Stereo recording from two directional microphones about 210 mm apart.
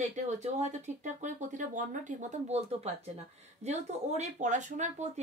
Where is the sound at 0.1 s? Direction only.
35° right (ahead or behind).